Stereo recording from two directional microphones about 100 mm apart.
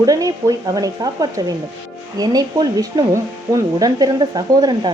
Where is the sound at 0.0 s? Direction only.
35° right (ahead or behind).